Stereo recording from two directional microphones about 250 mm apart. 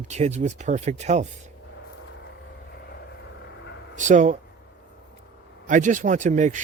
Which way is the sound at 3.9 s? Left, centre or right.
Right.